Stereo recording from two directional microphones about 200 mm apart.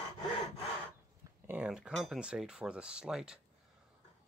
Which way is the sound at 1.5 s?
5° right (ahead or behind).